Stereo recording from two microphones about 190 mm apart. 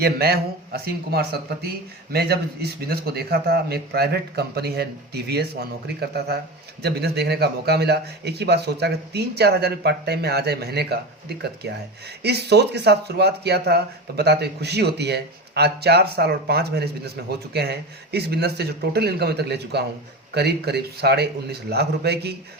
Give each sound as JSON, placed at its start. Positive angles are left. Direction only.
{"t": 0.0, "sound": "a man's voice", "side_deg": -55}